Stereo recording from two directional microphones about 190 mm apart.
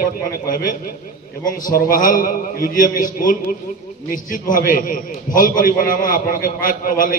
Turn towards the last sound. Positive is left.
turn(degrees=45)  # may be behind; listen again after turning